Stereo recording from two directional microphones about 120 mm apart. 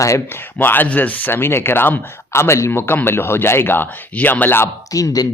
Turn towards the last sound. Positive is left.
turn(degrees=30)  # may be behind; listen again after turning